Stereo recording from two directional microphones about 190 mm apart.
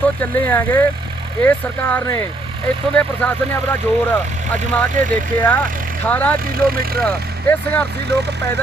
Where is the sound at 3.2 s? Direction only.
5° left (ahead or behind).